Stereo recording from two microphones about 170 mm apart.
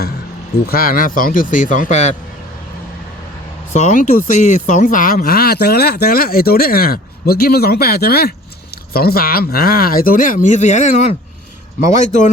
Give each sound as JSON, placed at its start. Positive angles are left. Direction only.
{"t": 0.7, "sound": "a man's voice", "side_deg": 60}
{"t": 3.7, "sound": "a man's voice", "side_deg": 45}